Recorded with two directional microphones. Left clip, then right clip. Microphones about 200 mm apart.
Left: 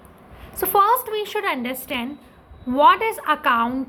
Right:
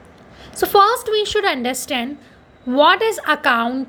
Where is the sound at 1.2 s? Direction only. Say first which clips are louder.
Right 6 dB; 30° right (ahead or behind).